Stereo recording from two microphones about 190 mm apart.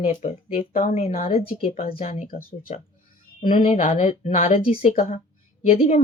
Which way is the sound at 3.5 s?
45° left (ahead or behind).